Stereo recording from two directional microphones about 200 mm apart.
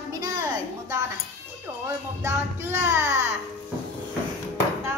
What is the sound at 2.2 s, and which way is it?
Speech, 10° right (ahead or behind).